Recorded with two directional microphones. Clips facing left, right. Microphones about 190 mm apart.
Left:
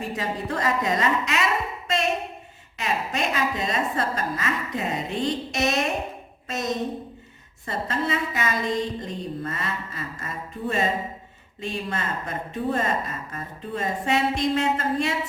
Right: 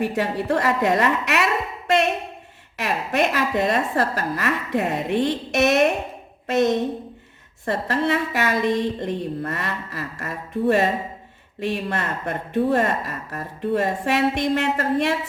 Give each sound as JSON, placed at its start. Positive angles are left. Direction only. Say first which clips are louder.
{"t": 0.0, "sound": "a woman's voice", "louder": "right 6 dB", "side_deg": -70}
{"t": 2.7, "sound": "a woman's voice", "louder": "right 5 dB", "side_deg": -65}